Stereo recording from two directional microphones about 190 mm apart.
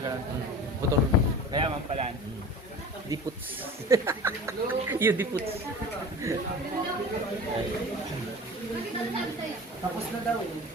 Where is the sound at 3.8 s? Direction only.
15° right (ahead or behind).